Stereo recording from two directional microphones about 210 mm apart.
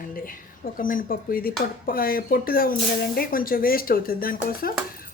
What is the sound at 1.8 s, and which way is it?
Speech, 45° left (ahead or behind).